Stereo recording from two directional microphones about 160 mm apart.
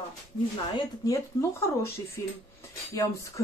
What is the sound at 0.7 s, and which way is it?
Speech, 20° left (ahead or behind).